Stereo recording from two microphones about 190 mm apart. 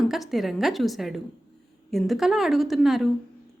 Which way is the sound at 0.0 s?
Centre (ahead or behind).